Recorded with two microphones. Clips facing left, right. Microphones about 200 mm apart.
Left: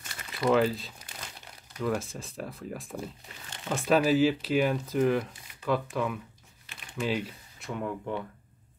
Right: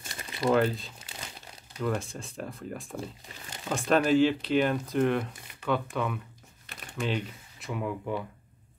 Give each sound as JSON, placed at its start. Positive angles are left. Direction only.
{"t": 0.0, "sound": "crumpling", "side_deg": -30}
{"t": 0.5, "sound": "speech", "side_deg": 0}